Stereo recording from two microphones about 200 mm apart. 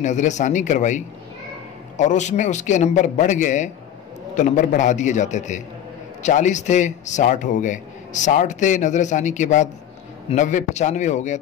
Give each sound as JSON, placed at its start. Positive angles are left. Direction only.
{"t": 0.0, "sound": "a man's voice", "side_deg": 35}